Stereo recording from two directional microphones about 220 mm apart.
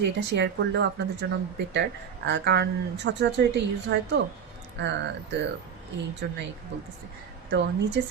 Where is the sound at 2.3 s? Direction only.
50° right (ahead or behind).